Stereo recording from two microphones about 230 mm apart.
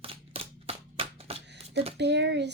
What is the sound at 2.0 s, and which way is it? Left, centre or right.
Speech, right.